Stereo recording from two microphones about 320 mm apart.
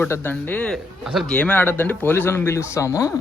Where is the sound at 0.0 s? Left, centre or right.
Centre.